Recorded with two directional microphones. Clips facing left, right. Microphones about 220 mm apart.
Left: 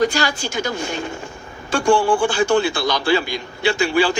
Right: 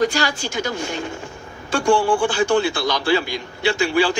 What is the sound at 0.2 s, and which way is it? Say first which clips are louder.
Speech: left 1 dB; 50° left (ahead or behind).